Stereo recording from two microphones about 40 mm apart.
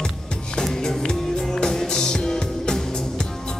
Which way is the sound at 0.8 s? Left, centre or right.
Centre.